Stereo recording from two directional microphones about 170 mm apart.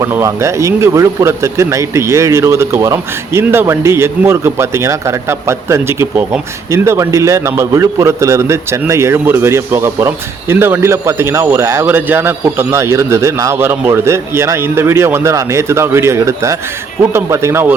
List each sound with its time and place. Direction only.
0.0 s speech: 20° right (ahead or behind)